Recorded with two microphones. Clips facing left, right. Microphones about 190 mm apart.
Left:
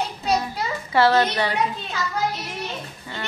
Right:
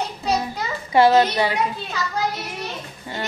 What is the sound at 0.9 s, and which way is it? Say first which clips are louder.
Speech: right 3 dB; 15° right (ahead or behind).